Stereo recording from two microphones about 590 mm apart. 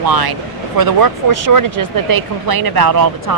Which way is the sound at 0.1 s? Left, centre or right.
Right.